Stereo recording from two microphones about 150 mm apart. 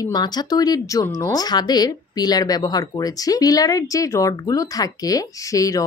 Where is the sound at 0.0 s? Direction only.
30° left (ahead or behind).